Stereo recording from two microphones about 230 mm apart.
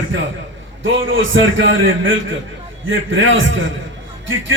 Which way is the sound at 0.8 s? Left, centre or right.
Right.